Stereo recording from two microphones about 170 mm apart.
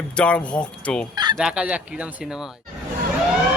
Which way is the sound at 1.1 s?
25° right (ahead or behind).